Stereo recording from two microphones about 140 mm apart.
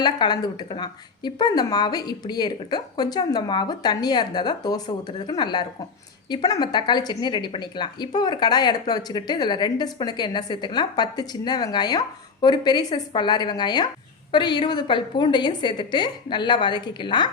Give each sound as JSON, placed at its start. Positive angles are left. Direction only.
{"t": 0.0, "sound": "speech", "side_deg": 30}